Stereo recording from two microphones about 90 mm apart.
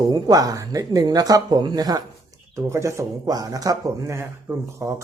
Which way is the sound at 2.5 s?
35° right (ahead or behind).